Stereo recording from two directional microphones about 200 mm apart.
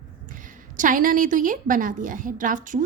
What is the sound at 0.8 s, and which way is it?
A woman's voice, 40° right (ahead or behind).